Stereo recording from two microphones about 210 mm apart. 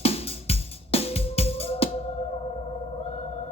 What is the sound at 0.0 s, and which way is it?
Music, 30° left (ahead or behind).